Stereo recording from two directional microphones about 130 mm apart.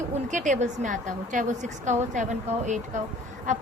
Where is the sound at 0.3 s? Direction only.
70° right (ahead or behind).